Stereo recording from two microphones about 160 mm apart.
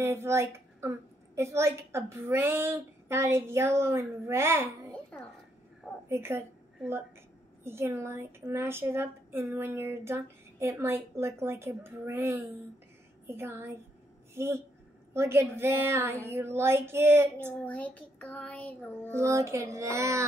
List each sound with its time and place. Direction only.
0.0 s a woman's voice: 15° right (ahead or behind)
5.1 s a woman's voice: 5° left (ahead or behind)
6.0 s a woman's voice: 15° right (ahead or behind)
7.6 s a woman's voice: 15° right (ahead or behind)
17.6 s child singing: 10° left (ahead or behind)
19.1 s a sound: 20° right (ahead or behind)